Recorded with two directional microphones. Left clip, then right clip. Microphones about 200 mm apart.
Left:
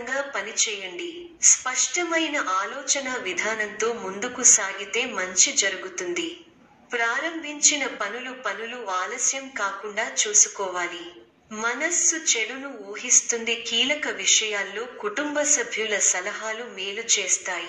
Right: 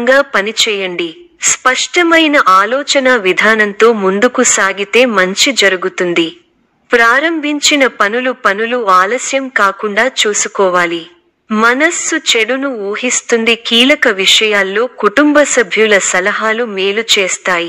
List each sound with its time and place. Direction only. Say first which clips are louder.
0.0 s a woman's voice: right 18 dB; 40° right (ahead or behind)